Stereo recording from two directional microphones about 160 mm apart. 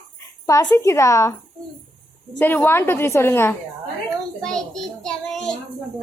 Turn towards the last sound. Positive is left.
turn(degrees=5)  # may be behind; listen again after turning